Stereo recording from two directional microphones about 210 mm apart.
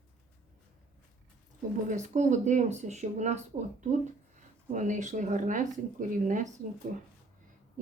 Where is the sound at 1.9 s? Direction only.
35° right (ahead or behind).